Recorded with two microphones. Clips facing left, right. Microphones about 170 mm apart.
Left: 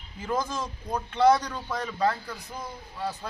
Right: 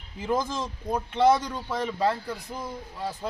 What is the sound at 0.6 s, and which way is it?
Speech, 20° right (ahead or behind).